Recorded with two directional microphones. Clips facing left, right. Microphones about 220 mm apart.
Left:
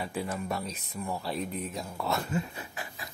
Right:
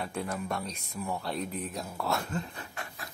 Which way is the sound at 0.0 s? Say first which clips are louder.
Left 1 dB; 5° left (ahead or behind).